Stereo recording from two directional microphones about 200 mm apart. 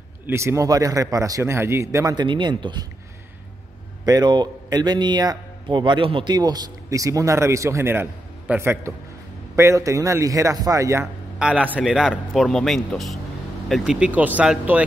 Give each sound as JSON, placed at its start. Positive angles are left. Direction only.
{"t": 0.3, "sound": "a man's voice", "side_deg": -15}
{"t": 4.0, "sound": "a man's voice", "side_deg": -20}